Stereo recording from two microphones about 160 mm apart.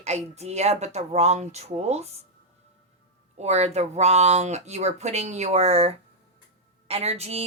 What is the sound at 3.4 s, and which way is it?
A woman's voice, 40° right (ahead or behind).